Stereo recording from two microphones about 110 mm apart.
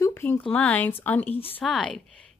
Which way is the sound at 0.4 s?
10° left (ahead or behind).